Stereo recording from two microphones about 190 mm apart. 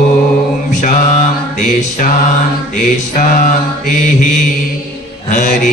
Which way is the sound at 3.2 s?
45° left (ahead or behind).